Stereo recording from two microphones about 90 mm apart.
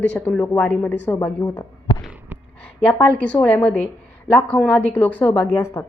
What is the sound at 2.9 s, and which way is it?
A woman's voice, 15° left (ahead or behind).